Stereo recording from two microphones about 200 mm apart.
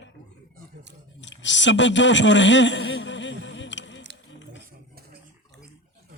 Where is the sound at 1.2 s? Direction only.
65° left (ahead or behind).